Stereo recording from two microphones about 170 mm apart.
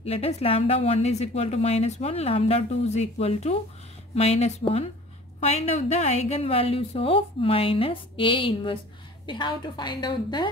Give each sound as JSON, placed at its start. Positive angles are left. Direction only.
{"t": 0.0, "sound": "a woman's voice", "side_deg": 35}